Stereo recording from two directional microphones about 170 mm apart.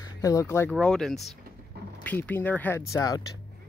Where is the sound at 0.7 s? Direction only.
5° left (ahead or behind); by 3.2 s 20° left (ahead or behind).